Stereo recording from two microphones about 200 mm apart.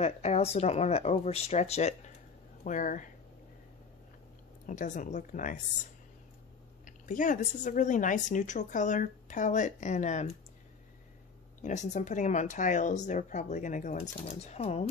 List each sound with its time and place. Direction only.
0.0 s speech: 30° left (ahead or behind)
4.6 s speech: 40° left (ahead or behind)
6.8 s speech: 40° left (ahead or behind)
11.6 s speech: 35° left (ahead or behind)